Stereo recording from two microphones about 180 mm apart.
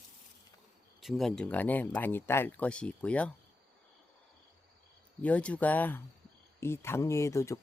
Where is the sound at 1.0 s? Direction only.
Centre (ahead or behind).